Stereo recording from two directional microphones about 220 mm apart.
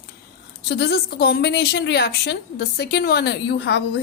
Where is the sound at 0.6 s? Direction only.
50° left (ahead or behind).